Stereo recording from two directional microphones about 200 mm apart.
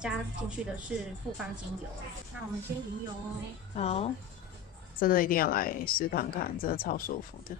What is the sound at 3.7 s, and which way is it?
Speech, 30° left (ahead or behind).